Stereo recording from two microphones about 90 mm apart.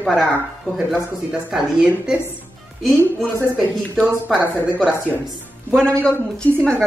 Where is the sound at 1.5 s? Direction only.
10° right (ahead or behind).